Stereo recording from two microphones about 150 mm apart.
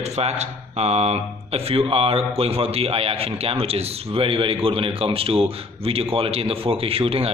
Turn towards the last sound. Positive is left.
turn(degrees=-40)  # may be behind; listen again after turning